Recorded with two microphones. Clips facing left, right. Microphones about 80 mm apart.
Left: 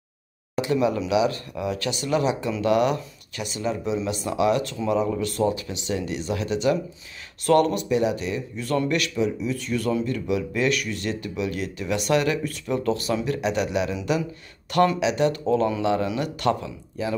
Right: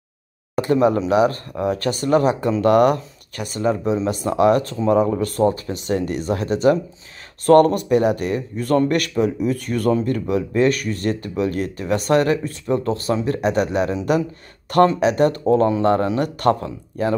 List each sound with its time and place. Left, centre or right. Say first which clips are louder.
0.6 s speech: right 6 dB; right